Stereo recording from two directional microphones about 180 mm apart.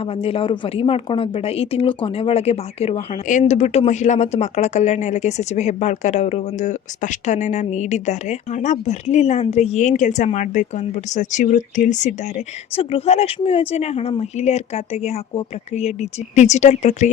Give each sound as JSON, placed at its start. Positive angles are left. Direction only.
{"t": 0.2, "sound": "speech", "side_deg": 30}
{"t": 12.7, "sound": "speech", "side_deg": 30}